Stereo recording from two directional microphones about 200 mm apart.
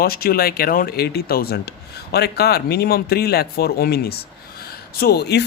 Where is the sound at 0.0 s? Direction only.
50° left (ahead or behind).